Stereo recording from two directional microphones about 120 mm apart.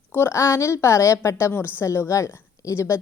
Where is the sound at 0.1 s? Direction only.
20° left (ahead or behind).